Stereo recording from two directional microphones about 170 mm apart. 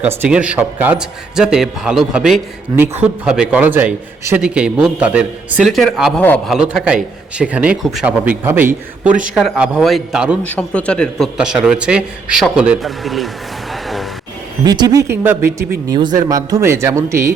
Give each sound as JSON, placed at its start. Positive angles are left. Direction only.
{"t": 0.0, "sound": "a man's voice", "side_deg": -10}
{"t": 10.4, "sound": "a man's voice", "side_deg": 5}
{"t": 13.8, "sound": "music", "side_deg": 0}
{"t": 14.6, "sound": "a man's voice", "side_deg": -25}
{"t": 15.9, "sound": "a man's voice", "side_deg": -25}